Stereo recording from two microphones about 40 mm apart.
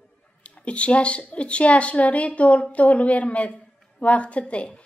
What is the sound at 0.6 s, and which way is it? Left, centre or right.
A woman's voice, left.